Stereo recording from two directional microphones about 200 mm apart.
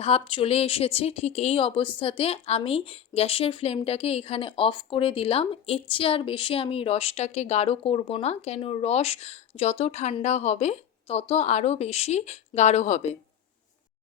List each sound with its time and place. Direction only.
0.0 s speech: 25° left (ahead or behind)